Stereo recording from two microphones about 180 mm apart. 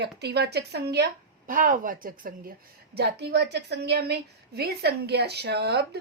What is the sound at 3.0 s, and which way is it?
A woman's voice, 65° right (ahead or behind).